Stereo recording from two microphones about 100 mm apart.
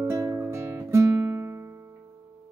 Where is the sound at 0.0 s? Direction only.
30° right (ahead or behind).